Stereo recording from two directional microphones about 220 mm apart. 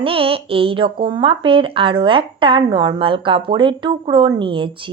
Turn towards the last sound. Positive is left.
turn(degrees=-20)  # may be behind; listen again after turning